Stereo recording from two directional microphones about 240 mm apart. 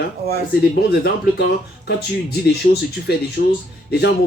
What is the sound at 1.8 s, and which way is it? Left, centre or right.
Speech, left.